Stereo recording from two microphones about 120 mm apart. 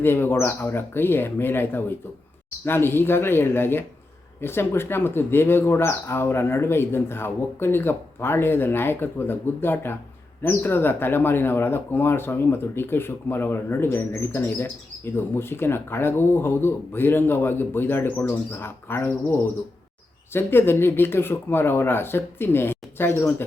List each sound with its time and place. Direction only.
0.0 s speech: 20° left (ahead or behind)